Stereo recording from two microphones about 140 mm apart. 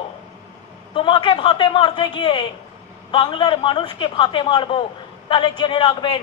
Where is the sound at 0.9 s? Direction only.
35° left (ahead or behind).